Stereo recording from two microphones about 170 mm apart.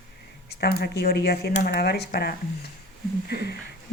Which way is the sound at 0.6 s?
70° left (ahead or behind).